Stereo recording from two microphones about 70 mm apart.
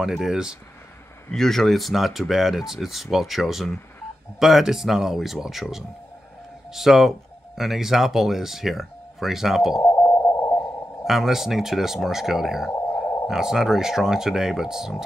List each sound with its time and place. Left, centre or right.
0.0 s speech: centre
1.3 s speech: centre
9.9 s sidetone: left
11.1 s speech: centre